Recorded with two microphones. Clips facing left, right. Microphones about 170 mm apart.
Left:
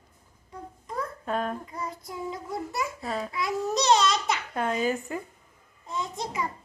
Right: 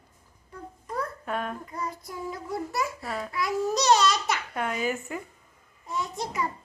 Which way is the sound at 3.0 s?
20° left (ahead or behind).